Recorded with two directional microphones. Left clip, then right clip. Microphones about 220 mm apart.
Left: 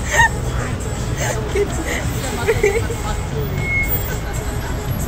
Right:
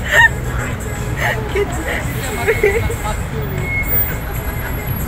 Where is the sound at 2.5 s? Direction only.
15° right (ahead or behind).